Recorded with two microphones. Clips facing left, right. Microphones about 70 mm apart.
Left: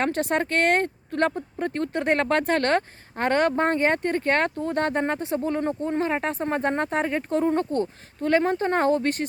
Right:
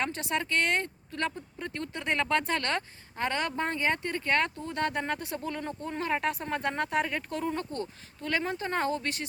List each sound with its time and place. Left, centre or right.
0.0 s speech: left